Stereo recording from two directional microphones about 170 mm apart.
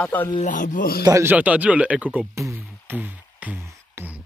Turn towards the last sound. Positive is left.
turn(degrees=-10)  # may be behind; listen again after turning